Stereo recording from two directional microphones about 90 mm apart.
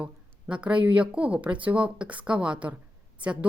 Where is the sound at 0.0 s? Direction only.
10° right (ahead or behind).